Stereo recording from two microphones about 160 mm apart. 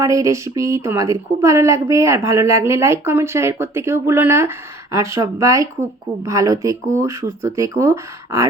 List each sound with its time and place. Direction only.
0.0 s speech: 20° right (ahead or behind)